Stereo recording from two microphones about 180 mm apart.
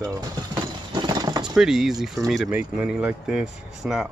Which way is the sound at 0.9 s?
20° right (ahead or behind).